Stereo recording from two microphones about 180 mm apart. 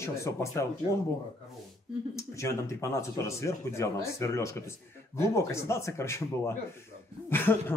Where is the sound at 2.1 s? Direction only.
15° left (ahead or behind).